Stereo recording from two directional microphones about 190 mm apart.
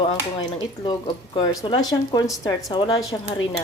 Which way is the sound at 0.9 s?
25° left (ahead or behind).